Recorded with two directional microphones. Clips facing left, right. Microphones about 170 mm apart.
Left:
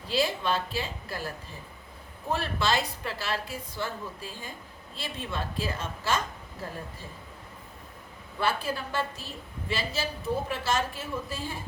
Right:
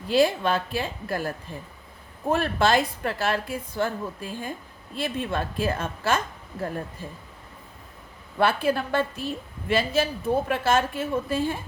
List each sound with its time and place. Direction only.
0.1 s a woman's voice: 50° right (ahead or behind)
2.3 s a woman's voice: 50° right (ahead or behind)
8.4 s a woman's voice: 60° right (ahead or behind)